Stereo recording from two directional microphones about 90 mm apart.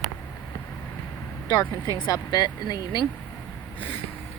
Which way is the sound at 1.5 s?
50° left (ahead or behind).